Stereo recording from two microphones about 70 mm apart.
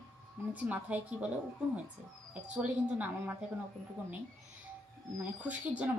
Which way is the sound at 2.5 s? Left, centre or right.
Centre.